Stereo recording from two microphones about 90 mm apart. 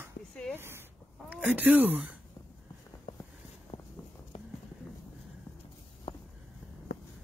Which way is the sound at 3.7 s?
90° left.